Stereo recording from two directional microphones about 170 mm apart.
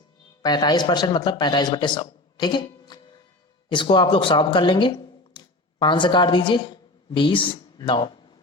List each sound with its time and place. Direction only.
0.4 s a man's voice: 25° left (ahead or behind)